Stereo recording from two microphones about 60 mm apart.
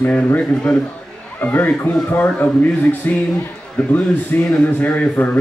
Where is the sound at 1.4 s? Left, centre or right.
Left.